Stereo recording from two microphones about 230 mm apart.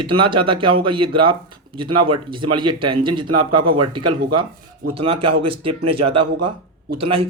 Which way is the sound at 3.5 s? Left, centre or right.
Right.